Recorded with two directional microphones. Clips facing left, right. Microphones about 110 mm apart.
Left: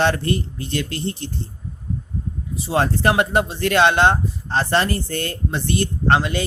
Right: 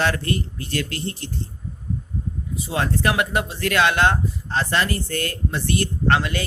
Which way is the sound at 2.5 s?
35° left (ahead or behind).